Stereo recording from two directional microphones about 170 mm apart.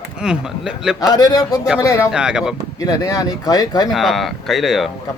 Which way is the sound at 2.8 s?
20° left (ahead or behind).